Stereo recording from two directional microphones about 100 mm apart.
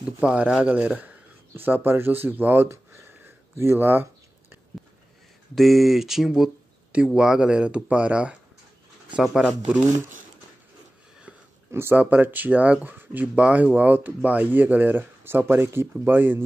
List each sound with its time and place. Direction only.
0.0 s speech: 10° right (ahead or behind)
3.5 s a sound: 25° right (ahead or behind)
5.5 s speech: centre (ahead or behind)
11.7 s speech: 20° right (ahead or behind)